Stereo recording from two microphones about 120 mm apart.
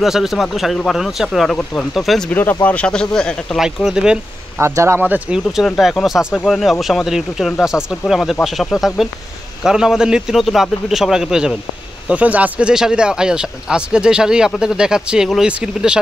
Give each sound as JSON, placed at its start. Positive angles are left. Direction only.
{"t": 0.0, "sound": "speech", "side_deg": 0}
{"t": 3.6, "sound": "speech", "side_deg": -5}
{"t": 4.6, "sound": "speech", "side_deg": -20}
{"t": 5.8, "sound": "speech", "side_deg": 0}